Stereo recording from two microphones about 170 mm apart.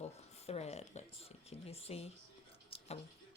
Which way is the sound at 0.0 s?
40° left (ahead or behind).